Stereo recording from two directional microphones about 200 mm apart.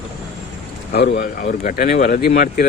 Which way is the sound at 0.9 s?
50° left (ahead or behind).